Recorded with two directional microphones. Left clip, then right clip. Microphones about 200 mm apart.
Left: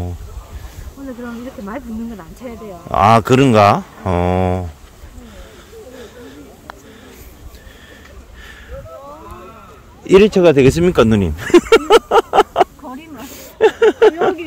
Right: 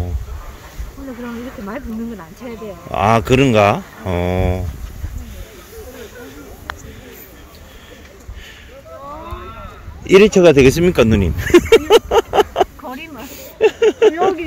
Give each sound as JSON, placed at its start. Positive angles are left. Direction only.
{"t": 1.2, "sound": "speech", "side_deg": 50}
{"t": 2.9, "sound": "speech", "side_deg": 30}
{"t": 10.2, "sound": "speech", "side_deg": 0}
{"t": 10.7, "sound": "speech", "side_deg": 15}
{"t": 12.8, "sound": "a sound", "side_deg": -40}
{"t": 13.2, "sound": "speech", "side_deg": 35}